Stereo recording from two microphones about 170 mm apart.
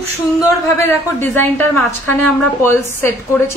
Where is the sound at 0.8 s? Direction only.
10° left (ahead or behind).